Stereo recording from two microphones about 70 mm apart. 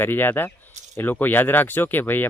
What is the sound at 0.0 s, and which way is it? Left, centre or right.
Speech, left.